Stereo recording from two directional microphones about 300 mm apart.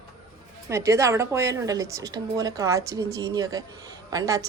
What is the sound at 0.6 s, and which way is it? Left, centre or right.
Speech, centre.